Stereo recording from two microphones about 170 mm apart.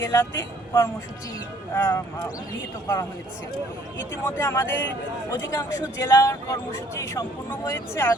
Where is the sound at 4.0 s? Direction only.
15° left (ahead or behind).